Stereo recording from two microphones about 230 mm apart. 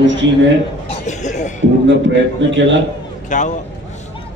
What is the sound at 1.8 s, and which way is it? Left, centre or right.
Speech, right.